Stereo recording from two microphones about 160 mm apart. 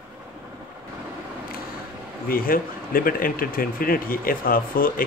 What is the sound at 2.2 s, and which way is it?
Speech, 65° left (ahead or behind).